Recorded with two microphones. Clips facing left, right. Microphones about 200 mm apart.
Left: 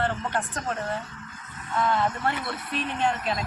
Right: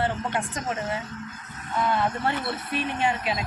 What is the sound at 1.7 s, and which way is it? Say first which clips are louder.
A man's voice: even; 15° right (ahead or behind).